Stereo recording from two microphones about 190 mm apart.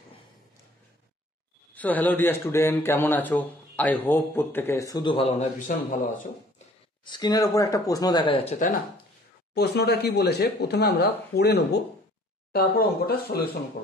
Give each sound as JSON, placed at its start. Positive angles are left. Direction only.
{"t": 1.8, "sound": "speech", "side_deg": 10}
{"t": 7.1, "sound": "speech", "side_deg": 20}
{"t": 8.5, "sound": "speech", "side_deg": 40}
{"t": 9.5, "sound": "speech", "side_deg": 60}